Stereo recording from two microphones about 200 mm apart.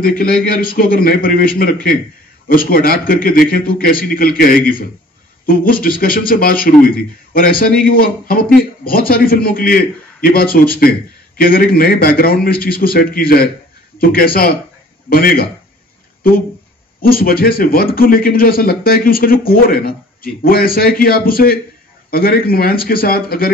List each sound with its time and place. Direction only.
0.0 s a man's voice: 45° left (ahead or behind)